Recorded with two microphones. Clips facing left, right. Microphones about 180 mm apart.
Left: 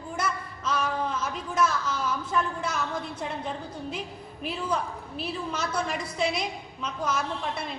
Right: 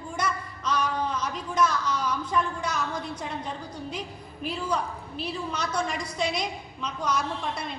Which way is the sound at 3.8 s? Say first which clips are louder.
Left 1 dB; 5° left (ahead or behind).